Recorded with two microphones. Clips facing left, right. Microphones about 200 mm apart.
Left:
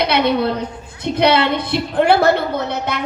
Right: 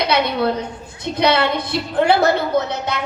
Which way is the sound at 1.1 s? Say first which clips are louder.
Left 2 dB; 55° left (ahead or behind).